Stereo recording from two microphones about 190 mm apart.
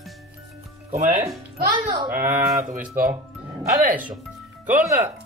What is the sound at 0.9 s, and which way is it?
Speech, 35° right (ahead or behind).